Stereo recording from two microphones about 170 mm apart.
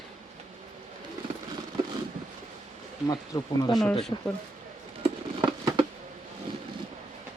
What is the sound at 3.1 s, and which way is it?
Speech, 20° left (ahead or behind).